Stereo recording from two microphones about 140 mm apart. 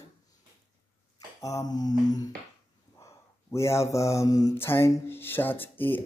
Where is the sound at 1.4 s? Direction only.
25° left (ahead or behind).